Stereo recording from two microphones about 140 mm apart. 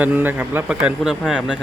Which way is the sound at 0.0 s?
15° right (ahead or behind).